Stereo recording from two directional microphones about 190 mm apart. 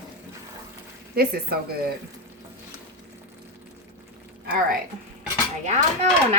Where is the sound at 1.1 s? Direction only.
55° right (ahead or behind).